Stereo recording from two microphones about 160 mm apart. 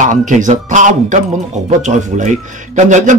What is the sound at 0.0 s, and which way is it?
Speech, 50° right (ahead or behind).